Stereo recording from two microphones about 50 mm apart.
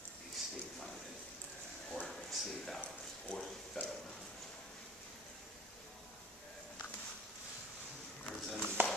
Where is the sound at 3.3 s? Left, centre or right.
Left.